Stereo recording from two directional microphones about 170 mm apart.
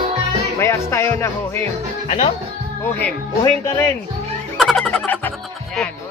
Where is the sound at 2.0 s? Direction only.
40° left (ahead or behind).